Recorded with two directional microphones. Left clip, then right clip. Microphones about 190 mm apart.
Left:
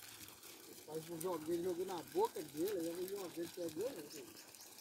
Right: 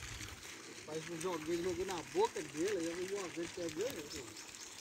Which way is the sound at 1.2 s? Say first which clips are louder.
Right 2 dB; centre (ahead or behind).